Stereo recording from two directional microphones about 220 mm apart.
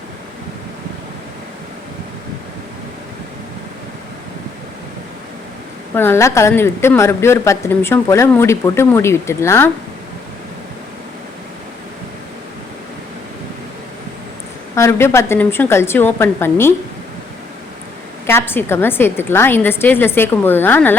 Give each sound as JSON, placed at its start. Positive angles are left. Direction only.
{"t": 5.9, "sound": "a woman's voice", "side_deg": 10}
{"t": 14.8, "sound": "a woman's voice", "side_deg": 10}
{"t": 18.3, "sound": "a woman's voice", "side_deg": 10}